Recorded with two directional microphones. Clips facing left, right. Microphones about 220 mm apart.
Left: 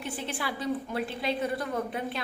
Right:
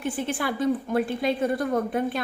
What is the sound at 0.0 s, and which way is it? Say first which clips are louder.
A woman's voice: right 7 dB; 50° right (ahead or behind).